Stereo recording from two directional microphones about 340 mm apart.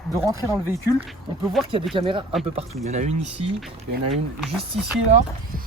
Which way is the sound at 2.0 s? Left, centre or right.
Centre.